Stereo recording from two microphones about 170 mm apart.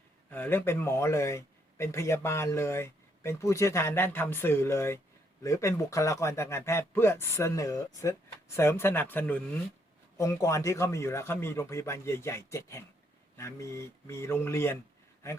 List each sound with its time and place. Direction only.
0.3 s speech: 10° left (ahead or behind)